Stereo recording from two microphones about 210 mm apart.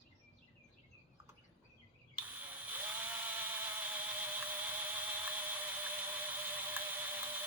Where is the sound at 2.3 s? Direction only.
10° right (ahead or behind).